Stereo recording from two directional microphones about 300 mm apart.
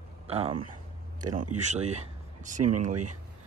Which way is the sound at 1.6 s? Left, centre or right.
Right.